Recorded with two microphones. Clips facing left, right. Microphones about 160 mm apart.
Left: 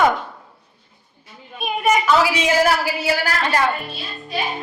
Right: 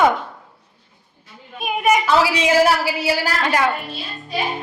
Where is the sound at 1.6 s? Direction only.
10° right (ahead or behind).